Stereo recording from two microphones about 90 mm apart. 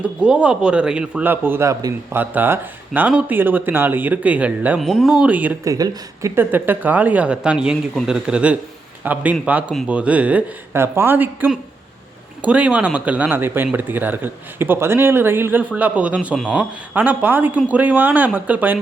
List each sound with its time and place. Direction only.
0.2 s speech: 10° right (ahead or behind)
1.3 s speech: 25° right (ahead or behind)
4.8 s speech: centre (ahead or behind)
5.2 s speech: 20° right (ahead or behind)
5.6 s speech: 45° right (ahead or behind)
6.3 s speech: 20° right (ahead or behind)